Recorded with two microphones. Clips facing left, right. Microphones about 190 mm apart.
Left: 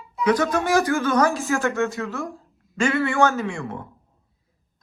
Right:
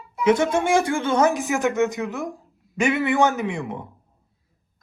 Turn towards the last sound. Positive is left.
turn(degrees=-20)  # may be behind; listen again after turning